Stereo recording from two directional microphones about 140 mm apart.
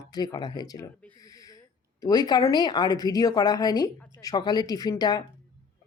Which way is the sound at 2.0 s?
25° left (ahead or behind).